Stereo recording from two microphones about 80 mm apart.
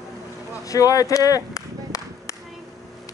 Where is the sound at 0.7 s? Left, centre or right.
Left.